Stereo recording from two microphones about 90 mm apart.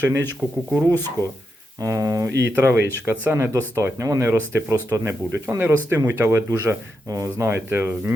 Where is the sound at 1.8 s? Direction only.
35° right (ahead or behind).